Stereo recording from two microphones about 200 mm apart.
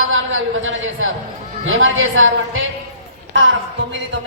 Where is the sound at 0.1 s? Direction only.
75° right (ahead or behind).